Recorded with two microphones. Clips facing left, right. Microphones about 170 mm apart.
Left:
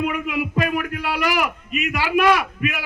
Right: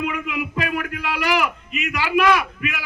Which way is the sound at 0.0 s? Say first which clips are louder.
Left 2 dB; 40° left (ahead or behind).